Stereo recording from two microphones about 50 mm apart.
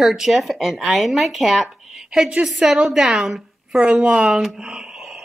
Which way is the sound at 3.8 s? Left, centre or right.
Right.